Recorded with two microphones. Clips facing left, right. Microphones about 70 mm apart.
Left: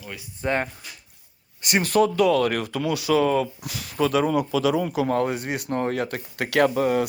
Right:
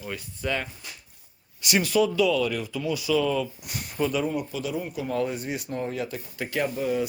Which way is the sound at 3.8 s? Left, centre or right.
Left.